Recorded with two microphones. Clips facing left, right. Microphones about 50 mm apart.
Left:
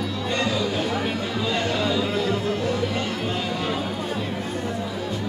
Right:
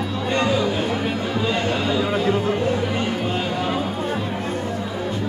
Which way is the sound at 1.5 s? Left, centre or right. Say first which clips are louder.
Even; right.